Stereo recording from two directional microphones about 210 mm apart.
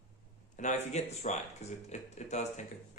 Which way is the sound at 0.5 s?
35° left (ahead or behind).